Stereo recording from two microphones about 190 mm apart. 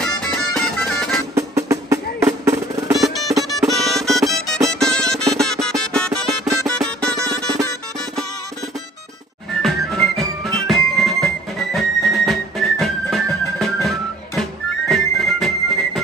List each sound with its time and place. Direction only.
0.0 s music: 5° left (ahead or behind)
1.3 s music: 15° right (ahead or behind)
3.2 s music: centre (ahead or behind)
9.6 s music: centre (ahead or behind)
14.9 s music: centre (ahead or behind)